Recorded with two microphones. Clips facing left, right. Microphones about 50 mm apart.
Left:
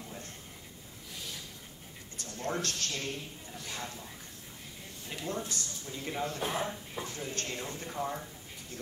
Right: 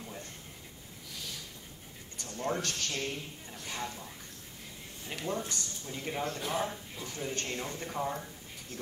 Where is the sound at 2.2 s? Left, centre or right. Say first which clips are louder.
Right 2 dB; right.